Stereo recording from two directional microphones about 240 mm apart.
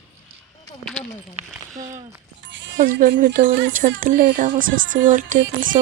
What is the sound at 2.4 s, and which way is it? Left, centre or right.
Music, right.